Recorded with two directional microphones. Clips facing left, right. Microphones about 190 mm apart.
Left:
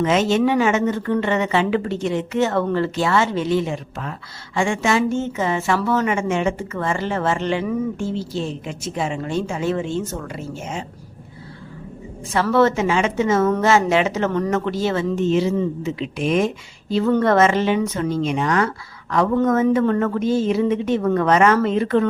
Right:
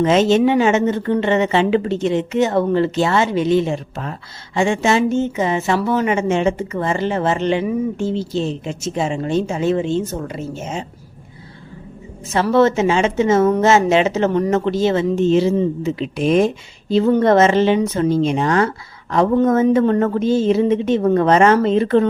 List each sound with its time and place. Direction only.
0.0 s speech: 30° right (ahead or behind)
12.3 s speech: 20° right (ahead or behind)
16.9 s speech: 25° right (ahead or behind)